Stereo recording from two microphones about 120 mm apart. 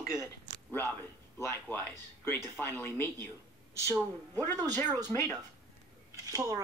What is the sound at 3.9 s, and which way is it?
Speech, 15° left (ahead or behind).